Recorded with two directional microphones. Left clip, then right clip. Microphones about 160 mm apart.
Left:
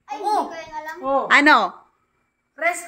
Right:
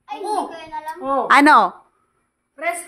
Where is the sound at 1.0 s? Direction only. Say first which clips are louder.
Even; 65° right (ahead or behind).